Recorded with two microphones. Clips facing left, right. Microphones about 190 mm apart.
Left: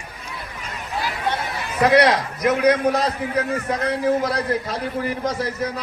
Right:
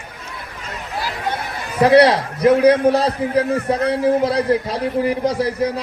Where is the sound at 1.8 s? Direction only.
30° right (ahead or behind).